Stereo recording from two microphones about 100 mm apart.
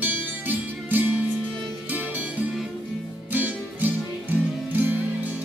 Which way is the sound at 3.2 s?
15° right (ahead or behind).